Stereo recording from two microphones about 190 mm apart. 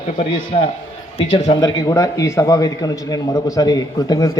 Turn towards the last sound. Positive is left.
turn(degrees=20)  # may be behind; listen again after turning